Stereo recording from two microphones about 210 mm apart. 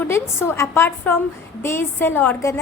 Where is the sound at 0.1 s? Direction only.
10° left (ahead or behind).